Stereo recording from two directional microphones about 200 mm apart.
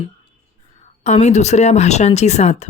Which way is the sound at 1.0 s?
35° left (ahead or behind).